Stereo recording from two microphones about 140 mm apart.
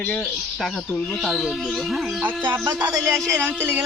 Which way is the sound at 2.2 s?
10° right (ahead or behind).